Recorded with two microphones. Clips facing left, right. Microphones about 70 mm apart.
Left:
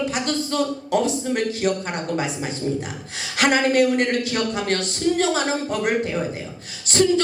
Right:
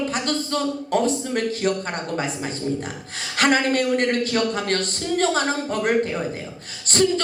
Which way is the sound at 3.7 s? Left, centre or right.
Right.